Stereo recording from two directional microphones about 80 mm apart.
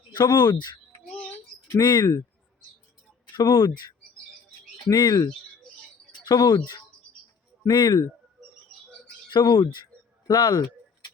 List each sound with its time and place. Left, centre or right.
0.1 s speech: left
3.3 s speech: left
4.9 s speech: left
9.3 s speech: left
9.8 s a sound: left